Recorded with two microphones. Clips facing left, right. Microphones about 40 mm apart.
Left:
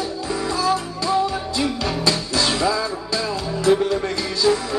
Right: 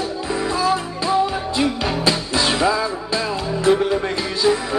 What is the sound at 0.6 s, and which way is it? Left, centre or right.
Music, right.